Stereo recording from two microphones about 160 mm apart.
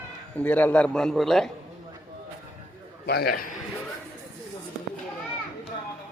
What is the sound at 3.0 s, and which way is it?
Speech, 80° left.